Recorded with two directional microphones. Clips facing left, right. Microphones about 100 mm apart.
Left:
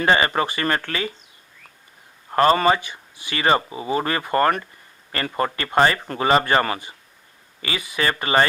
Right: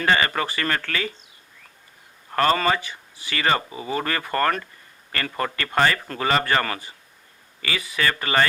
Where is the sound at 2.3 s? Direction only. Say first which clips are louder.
Left 4 dB; 20° left (ahead or behind).